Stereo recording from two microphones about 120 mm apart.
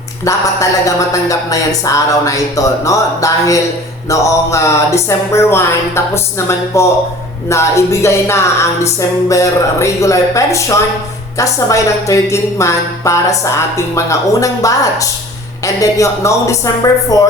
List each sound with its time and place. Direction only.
0.3 s a woman's voice: 25° left (ahead or behind)